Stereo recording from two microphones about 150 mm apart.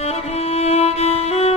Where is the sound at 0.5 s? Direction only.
45° left (ahead or behind).